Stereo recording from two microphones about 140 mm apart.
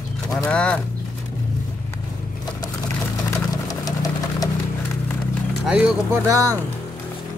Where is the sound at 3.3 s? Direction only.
25° left (ahead or behind).